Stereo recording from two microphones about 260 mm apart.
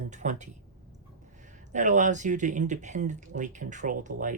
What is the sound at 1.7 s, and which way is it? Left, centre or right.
Speech, right.